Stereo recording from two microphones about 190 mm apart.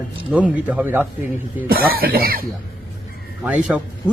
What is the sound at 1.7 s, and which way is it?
Speech, 50° right (ahead or behind).